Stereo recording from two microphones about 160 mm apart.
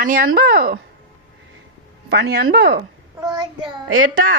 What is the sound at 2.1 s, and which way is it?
Speech, 90° right.